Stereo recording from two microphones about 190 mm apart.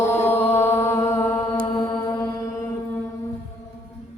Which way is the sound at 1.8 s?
15° left (ahead or behind).